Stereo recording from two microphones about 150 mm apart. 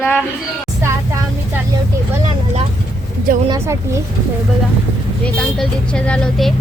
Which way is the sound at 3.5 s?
20° right (ahead or behind).